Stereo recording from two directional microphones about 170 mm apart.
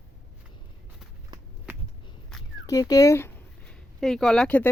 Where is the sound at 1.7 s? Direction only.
15° right (ahead or behind).